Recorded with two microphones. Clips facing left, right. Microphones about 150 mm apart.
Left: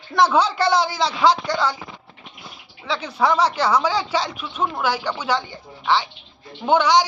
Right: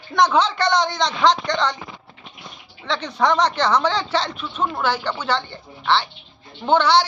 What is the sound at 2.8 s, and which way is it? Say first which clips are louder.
Speech: even; 5° left (ahead or behind).